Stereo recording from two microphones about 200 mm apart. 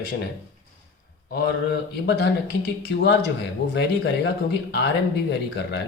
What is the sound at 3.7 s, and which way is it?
Speech, 55° left (ahead or behind).